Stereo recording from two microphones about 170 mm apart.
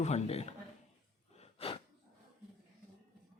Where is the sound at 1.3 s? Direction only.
35° left (ahead or behind).